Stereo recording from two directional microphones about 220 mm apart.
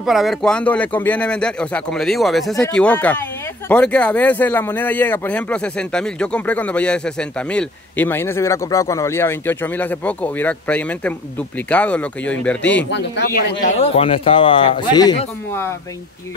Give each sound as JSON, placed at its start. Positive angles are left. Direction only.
{"t": 0.0, "sound": "speech", "side_deg": 0}
{"t": 12.9, "sound": "speech", "side_deg": 50}